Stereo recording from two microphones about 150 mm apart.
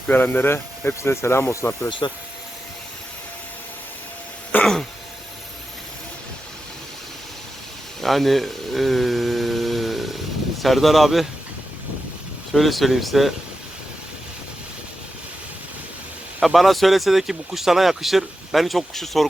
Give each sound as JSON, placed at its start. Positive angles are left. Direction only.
{"t": 0.1, "sound": "speech", "side_deg": 15}
{"t": 1.9, "sound": "speech", "side_deg": 30}
{"t": 4.5, "sound": "throat clearing", "side_deg": 5}
{"t": 8.0, "sound": "a sound", "side_deg": 0}
{"t": 10.6, "sound": "speech", "side_deg": 0}
{"t": 12.5, "sound": "speech", "side_deg": 0}
{"t": 16.4, "sound": "speech", "side_deg": 0}